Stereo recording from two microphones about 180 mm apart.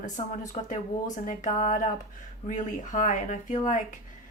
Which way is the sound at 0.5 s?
45° left (ahead or behind).